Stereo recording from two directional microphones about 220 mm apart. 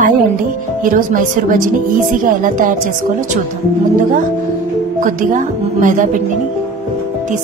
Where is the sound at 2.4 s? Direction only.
35° right (ahead or behind).